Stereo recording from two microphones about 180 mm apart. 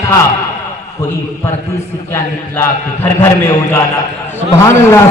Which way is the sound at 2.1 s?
15° left (ahead or behind).